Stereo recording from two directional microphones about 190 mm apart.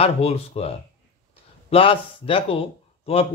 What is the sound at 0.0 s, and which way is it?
Speech, 30° left (ahead or behind).